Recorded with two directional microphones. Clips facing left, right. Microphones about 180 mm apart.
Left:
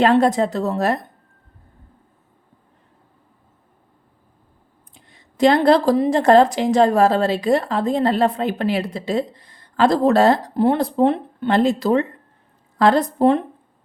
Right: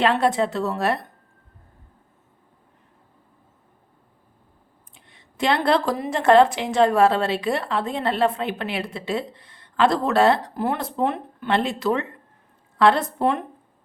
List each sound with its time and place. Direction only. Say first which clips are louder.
0.0 s a woman's voice: left 5 dB; 40° left (ahead or behind)
4.9 s a woman's voice: left 8 dB; 40° left (ahead or behind)